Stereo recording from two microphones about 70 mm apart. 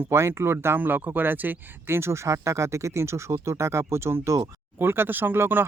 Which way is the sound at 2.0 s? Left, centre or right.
Right.